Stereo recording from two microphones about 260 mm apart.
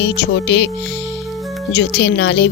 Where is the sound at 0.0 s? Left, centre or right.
Left.